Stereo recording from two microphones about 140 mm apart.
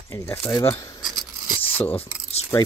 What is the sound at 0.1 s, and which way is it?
Speech, 20° left (ahead or behind).